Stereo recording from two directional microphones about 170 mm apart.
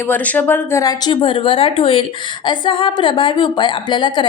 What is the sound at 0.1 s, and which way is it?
A woman's voice, 10° left (ahead or behind).